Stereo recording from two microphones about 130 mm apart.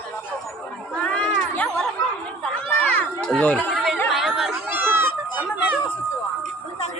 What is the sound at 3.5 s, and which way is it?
Chatter, centre (ahead or behind).